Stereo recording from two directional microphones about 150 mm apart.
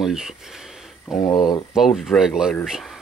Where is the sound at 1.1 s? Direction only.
30° left (ahead or behind).